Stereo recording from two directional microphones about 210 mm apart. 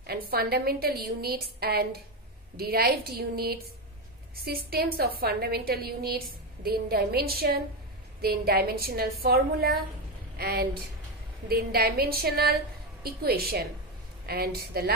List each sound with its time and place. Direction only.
0.0 s a woman's voice: 50° right (ahead or behind)